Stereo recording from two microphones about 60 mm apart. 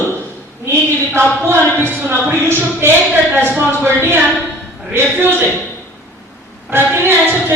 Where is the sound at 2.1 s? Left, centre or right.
Right.